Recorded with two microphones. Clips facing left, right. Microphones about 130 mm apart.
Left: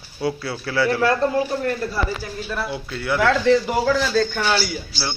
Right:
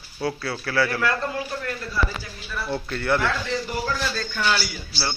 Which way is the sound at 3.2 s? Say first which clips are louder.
Left 9 dB; 90° left.